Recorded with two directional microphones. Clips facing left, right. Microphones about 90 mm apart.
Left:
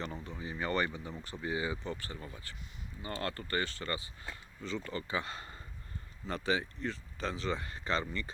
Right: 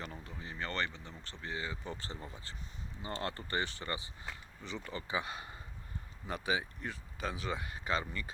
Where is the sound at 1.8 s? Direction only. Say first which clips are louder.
Left 2 dB; 20° right (ahead or behind).